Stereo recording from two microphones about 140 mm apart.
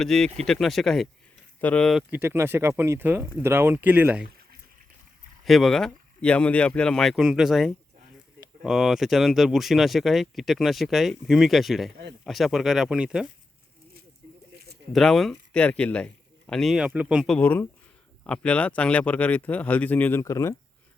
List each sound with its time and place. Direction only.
0.0 s speech: 5° left (ahead or behind)
2.0 s speech: 15° right (ahead or behind)
5.5 s speech: centre (ahead or behind)
14.9 s speech: 5° left (ahead or behind)
17.3 s speech: 15° left (ahead or behind)